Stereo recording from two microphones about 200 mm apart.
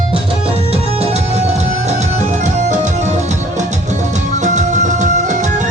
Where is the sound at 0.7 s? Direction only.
30° right (ahead or behind).